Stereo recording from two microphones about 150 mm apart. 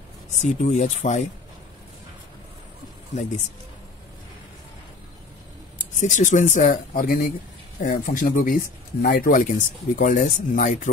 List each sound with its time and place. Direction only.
0.4 s speech: 55° left (ahead or behind)
3.1 s speech: 50° left (ahead or behind)
5.9 s speech: 55° left (ahead or behind)